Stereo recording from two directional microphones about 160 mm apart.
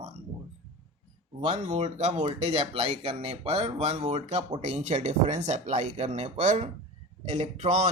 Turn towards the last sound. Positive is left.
turn(degrees=-45)  # may be behind; listen again after turning